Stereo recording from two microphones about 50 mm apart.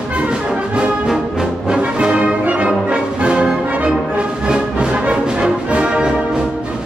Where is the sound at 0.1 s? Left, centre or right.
Right.